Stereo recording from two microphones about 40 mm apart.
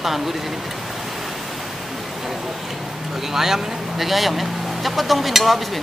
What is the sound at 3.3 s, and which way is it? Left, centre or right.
Speech, centre.